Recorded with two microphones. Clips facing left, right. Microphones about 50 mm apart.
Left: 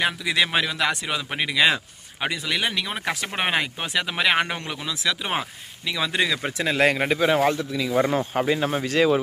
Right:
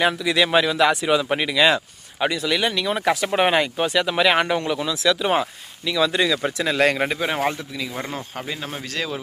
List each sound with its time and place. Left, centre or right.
0.0 s speech: centre
7.9 s speech: left